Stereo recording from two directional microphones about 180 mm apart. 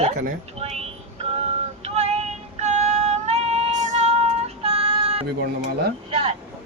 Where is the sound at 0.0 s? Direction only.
40° right (ahead or behind).